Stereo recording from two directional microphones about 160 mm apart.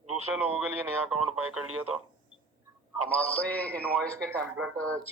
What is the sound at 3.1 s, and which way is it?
A man's voice, 10° left (ahead or behind).